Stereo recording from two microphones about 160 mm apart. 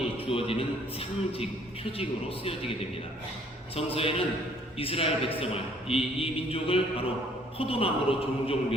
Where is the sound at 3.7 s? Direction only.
35° left (ahead or behind).